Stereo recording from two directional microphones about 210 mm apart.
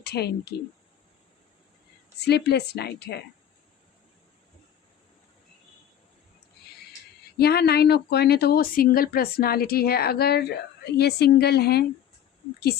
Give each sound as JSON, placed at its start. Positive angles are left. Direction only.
{"t": 0.0, "sound": "speech", "side_deg": 50}
{"t": 2.1, "sound": "speech", "side_deg": 50}
{"t": 7.3, "sound": "speech", "side_deg": 50}